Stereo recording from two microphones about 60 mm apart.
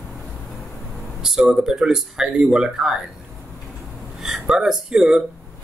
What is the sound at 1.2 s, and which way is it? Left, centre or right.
Speech, centre.